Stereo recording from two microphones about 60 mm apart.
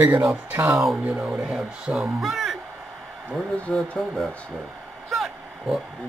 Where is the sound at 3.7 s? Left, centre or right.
Centre.